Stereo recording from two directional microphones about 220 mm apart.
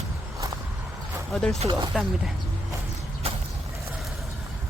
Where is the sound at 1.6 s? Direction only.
20° right (ahead or behind).